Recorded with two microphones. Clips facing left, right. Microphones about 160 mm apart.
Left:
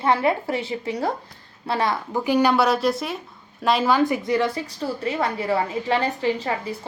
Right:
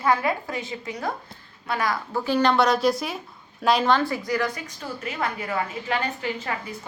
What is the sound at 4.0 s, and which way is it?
A woman's voice, 20° left (ahead or behind).